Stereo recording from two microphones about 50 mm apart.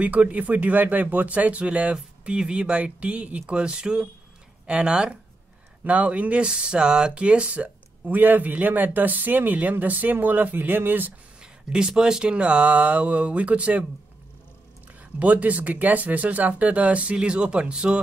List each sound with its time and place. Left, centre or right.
0.0 s speech: right
11.9 s speech: centre
15.1 s speech: right